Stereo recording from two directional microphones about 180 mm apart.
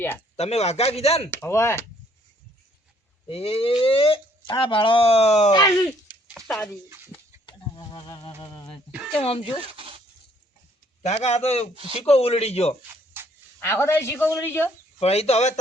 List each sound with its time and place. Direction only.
0.3 s speech: 35° left (ahead or behind)
1.3 s a woman's voice: 15° left (ahead or behind)
3.2 s speech: 30° left (ahead or behind)
5.5 s speech: 20° left (ahead or behind)
6.2 s a sound: centre (ahead or behind)
7.4 s a sound: 25° left (ahead or behind)
8.4 s speech: 25° left (ahead or behind)
9.6 s speech: 30° right (ahead or behind)
11.0 s speech: 35° left (ahead or behind)
13.2 s livestock: 10° right (ahead or behind)
13.6 s a woman's voice: 15° left (ahead or behind)
14.9 s speech: 35° left (ahead or behind)